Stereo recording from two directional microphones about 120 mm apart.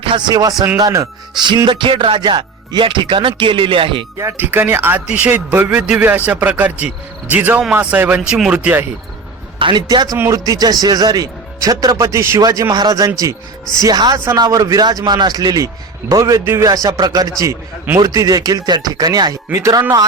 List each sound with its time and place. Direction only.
0.0 s speech: 45° right (ahead or behind)
0.8 s speech: 30° right (ahead or behind)
4.2 s speech: 20° right (ahead or behind)
9.6 s speech: 40° right (ahead or behind); by 19.8 s 25° right (ahead or behind)